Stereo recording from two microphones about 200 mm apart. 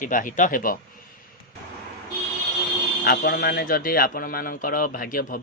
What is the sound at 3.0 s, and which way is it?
A man's voice, 50° left (ahead or behind).